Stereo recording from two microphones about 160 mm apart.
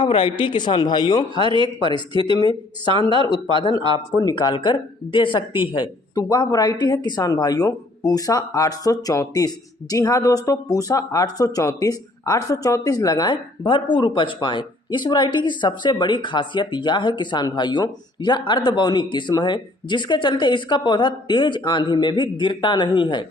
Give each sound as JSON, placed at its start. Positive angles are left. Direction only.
{"t": 0.0, "sound": "speech", "side_deg": 35}
{"t": 1.4, "sound": "speech", "side_deg": -30}
{"t": 3.1, "sound": "speech", "side_deg": -35}
{"t": 3.9, "sound": "speech", "side_deg": 25}